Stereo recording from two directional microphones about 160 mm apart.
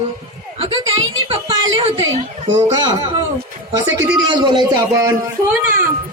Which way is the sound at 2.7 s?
25° right (ahead or behind).